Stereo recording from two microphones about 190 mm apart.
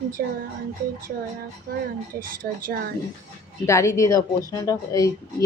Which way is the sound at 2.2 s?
50° right (ahead or behind).